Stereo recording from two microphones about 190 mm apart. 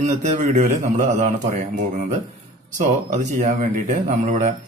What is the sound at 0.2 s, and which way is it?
A man's voice, 40° right (ahead or behind).